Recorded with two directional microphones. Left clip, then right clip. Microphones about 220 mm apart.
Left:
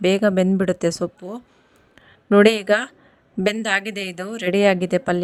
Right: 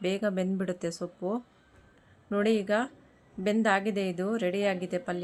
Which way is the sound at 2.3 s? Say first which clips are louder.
Left 12 dB; 50° left (ahead or behind).